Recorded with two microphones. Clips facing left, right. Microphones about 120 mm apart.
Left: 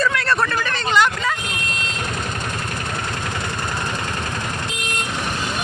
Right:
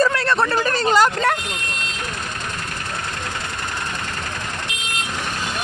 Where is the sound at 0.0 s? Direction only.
30° right (ahead or behind).